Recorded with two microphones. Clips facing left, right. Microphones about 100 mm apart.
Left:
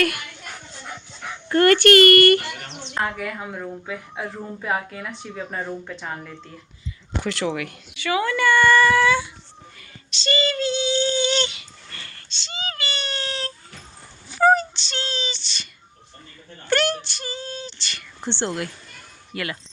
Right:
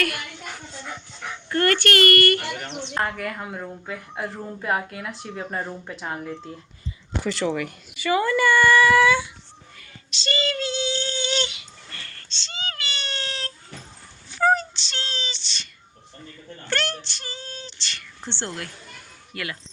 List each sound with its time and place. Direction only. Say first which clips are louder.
1.5 s speech: left 6 dB; 15° left (ahead or behind)
2.9 s a woman's voice: left 1 dB; centre (ahead or behind)
7.3 s a woman's voice: right 1 dB; 5° left (ahead or behind); by 9.3 s 15° right (ahead or behind)
10.1 s a woman's voice: left 3 dB; centre (ahead or behind)
12.0 s cat: left 1 dB; 10° left (ahead or behind)
14.3 s a sound: left 3 dB; 10° left (ahead or behind)
16.6 s speech: left 6 dB; 10° left (ahead or behind)
18.3 s speech: left 6 dB; 15° left (ahead or behind)
19.3 s speech: left 3 dB; centre (ahead or behind)